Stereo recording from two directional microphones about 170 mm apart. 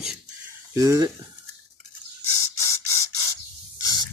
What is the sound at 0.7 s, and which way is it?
Speech, 20° right (ahead or behind).